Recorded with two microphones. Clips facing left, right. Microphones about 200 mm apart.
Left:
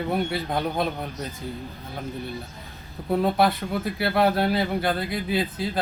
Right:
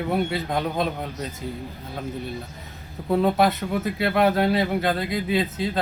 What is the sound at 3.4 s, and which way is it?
Speech, 20° right (ahead or behind).